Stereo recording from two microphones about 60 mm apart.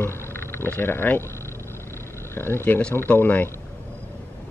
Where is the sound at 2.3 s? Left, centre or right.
Left.